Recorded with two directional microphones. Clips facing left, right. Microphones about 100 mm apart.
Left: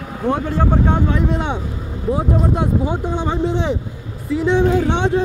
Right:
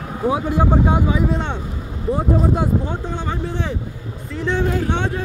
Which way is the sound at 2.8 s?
15° left (ahead or behind).